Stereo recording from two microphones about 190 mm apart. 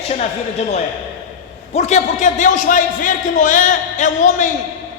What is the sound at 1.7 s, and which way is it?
A man's voice, 40° left (ahead or behind).